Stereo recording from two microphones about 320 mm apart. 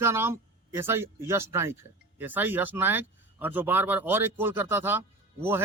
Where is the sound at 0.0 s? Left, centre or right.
Centre.